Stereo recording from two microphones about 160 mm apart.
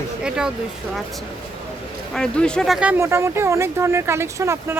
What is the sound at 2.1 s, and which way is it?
Speech, 5° left (ahead or behind).